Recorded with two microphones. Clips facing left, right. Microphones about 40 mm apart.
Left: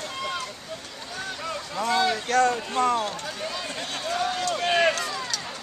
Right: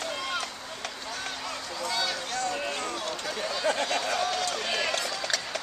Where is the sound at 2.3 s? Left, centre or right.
Left.